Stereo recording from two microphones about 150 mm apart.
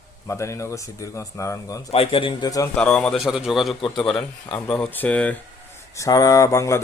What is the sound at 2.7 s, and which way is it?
A man's voice, 5° left (ahead or behind).